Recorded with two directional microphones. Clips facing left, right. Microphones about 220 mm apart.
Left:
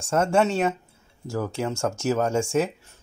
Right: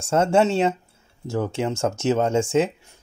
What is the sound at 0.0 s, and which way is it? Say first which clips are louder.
Speech: right 3 dB; 25° right (ahead or behind).